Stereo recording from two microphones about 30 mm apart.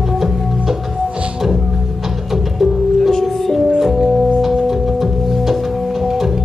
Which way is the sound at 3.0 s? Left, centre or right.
Centre.